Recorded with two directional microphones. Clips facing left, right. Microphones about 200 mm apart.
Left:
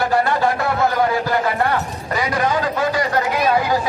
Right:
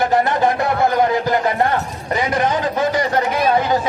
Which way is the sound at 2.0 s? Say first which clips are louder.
Right 2 dB; 20° right (ahead or behind).